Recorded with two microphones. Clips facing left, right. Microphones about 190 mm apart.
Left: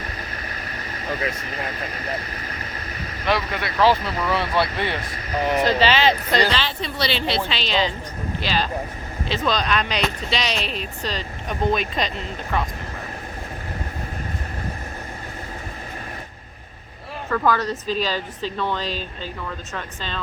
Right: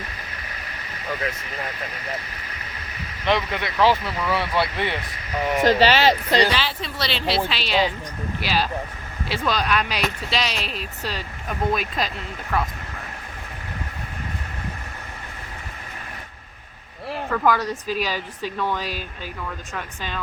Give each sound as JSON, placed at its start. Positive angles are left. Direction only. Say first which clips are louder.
{"t": 3.2, "sound": "speech", "louder": "right 1 dB", "side_deg": -20}
{"t": 5.6, "sound": "speech", "louder": "right 5 dB", "side_deg": -40}
{"t": 6.3, "sound": "speech", "louder": "right 1 dB", "side_deg": -10}
{"t": 17.3, "sound": "speech", "louder": "left 1 dB", "side_deg": -10}